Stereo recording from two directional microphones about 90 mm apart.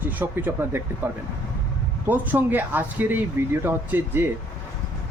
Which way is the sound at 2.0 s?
20° right (ahead or behind).